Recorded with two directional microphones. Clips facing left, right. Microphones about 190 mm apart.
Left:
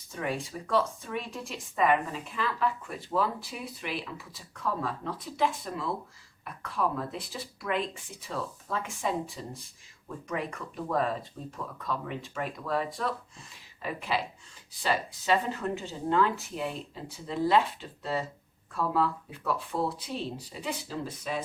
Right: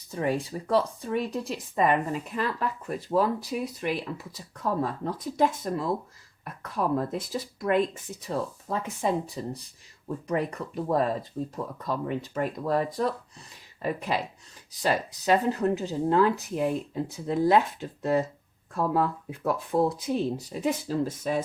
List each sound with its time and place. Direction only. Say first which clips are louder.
0.1 s speech: right 6 dB; 35° right (ahead or behind)